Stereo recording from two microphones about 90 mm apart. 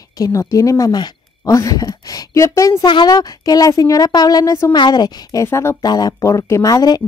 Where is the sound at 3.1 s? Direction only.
45° left (ahead or behind).